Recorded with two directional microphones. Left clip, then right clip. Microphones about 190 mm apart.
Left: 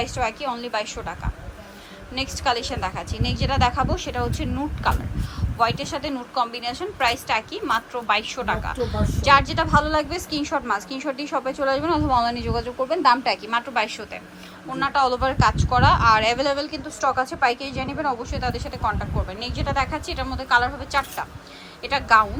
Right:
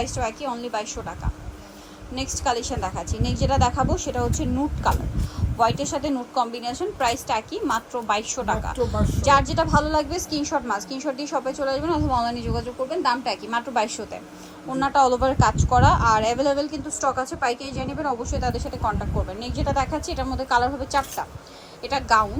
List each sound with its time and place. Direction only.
0.0 s a woman's voice: 15° right (ahead or behind)